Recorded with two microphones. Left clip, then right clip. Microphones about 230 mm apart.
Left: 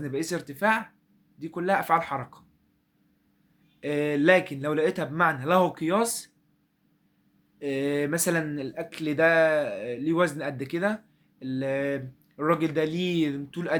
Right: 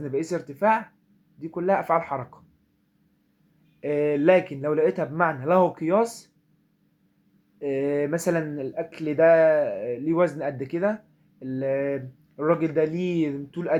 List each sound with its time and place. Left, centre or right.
0.0 s speech: left
3.8 s speech: left
7.6 s speech: left